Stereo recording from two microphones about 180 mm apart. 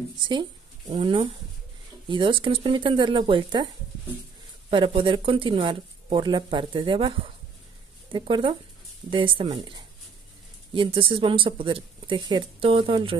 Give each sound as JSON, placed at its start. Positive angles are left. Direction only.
{"t": 0.3, "sound": "speech", "side_deg": -25}
{"t": 4.6, "sound": "speech", "side_deg": -30}